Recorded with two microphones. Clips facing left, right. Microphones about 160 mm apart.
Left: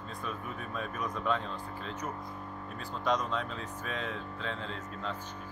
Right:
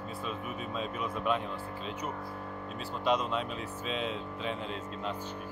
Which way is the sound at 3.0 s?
15° right (ahead or behind).